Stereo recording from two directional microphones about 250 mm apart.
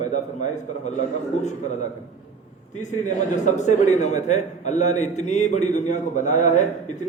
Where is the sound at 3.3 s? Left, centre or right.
Left.